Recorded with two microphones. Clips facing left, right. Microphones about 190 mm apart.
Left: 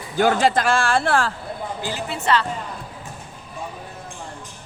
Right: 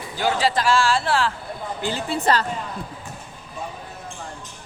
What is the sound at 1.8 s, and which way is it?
Speech, 30° right (ahead or behind).